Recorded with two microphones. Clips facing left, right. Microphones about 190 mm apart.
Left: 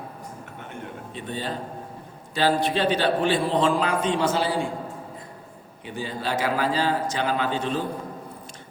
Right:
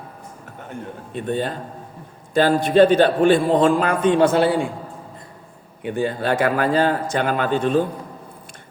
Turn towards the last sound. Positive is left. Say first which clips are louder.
# right 6 dB
turn(degrees=-50)  # may be behind; listen again after turning